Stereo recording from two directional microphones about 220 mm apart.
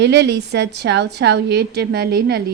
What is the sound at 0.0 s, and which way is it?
A woman's voice, 50° right (ahead or behind).